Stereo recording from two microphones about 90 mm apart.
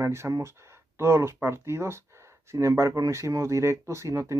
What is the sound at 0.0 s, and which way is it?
Speech, 30° right (ahead or behind).